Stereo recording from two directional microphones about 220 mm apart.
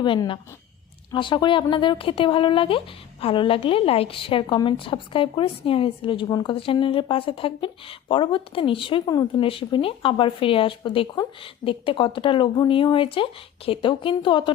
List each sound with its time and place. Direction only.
0.0 s speech: 20° left (ahead or behind)